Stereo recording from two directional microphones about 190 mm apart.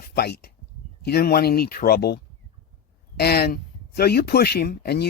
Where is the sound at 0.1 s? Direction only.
55° left (ahead or behind).